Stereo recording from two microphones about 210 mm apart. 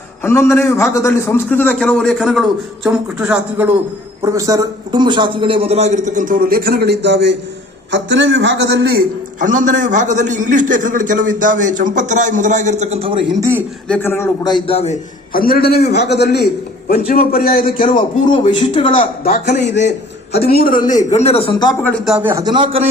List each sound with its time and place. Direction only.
0.2 s a man's voice: 10° left (ahead or behind); by 13.3 s 25° right (ahead or behind)
13.4 s speech: 10° right (ahead or behind)
13.8 s a man's voice: 10° left (ahead or behind); by 14.9 s 30° left (ahead or behind)
15.3 s a man's voice: 45° left (ahead or behind); by 18.9 s 25° left (ahead or behind)
19.2 s a man's voice: 35° left (ahead or behind)
19.6 s a man's voice: 55° left (ahead or behind)
20.9 s speech: 30° left (ahead or behind)
21.8 s speech: centre (ahead or behind); by 22.9 s 25° right (ahead or behind)